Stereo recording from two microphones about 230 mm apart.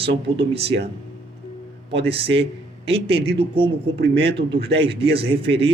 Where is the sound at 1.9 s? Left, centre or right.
Right.